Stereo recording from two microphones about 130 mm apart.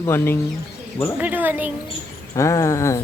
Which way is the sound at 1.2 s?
15° right (ahead or behind).